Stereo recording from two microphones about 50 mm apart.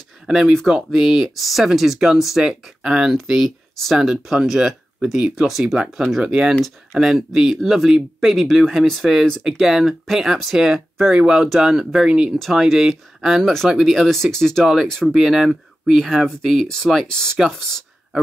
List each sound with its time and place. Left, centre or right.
0.3 s speech: centre
6.2 s speech: centre
12.4 s speech: centre
13.4 s speech: centre
13.7 s speech: centre
14.0 s speech: centre
14.6 s speech: centre